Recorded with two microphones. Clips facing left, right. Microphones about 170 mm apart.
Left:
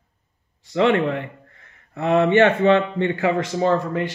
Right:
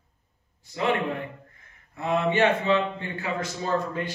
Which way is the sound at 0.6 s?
85° left.